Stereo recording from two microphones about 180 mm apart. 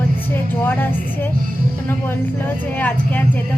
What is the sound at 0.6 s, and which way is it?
Speech, 10° left (ahead or behind).